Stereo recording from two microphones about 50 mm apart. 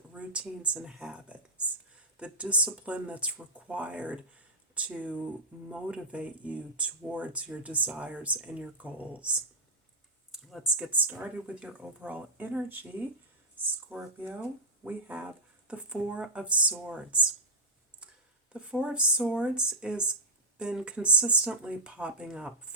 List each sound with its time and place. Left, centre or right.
0.1 s a woman's voice: right
10.3 s a sound: centre
10.8 s speech: right
13.9 s speech: right
18.5 s speech: right